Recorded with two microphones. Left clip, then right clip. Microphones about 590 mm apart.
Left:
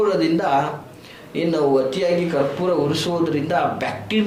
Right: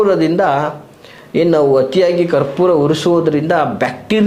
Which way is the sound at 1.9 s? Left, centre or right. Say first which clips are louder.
Right 8 dB; right.